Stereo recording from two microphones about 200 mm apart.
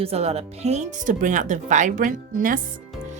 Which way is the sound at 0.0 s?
30° right (ahead or behind).